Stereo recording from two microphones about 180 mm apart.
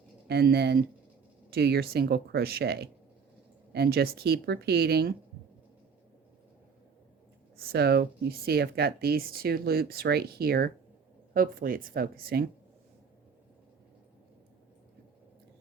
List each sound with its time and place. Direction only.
0.3 s speech: 65° right (ahead or behind)
7.7 s speech: 65° right (ahead or behind)